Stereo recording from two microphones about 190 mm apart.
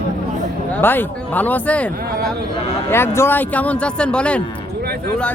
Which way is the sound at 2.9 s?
15° left (ahead or behind).